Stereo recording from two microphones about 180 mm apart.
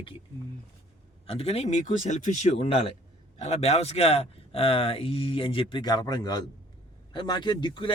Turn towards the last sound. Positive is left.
turn(degrees=25)  # may be behind; listen again after turning